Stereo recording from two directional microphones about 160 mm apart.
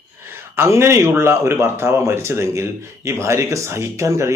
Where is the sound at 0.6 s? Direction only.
15° right (ahead or behind).